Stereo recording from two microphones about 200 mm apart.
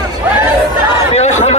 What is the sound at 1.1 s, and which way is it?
Chatter, 35° left (ahead or behind).